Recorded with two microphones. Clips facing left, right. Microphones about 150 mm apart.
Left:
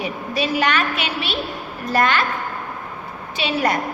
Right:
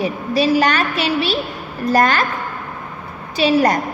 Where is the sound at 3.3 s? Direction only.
40° right (ahead or behind).